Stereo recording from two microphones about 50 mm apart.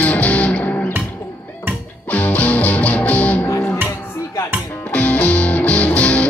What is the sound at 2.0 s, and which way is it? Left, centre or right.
Music, left.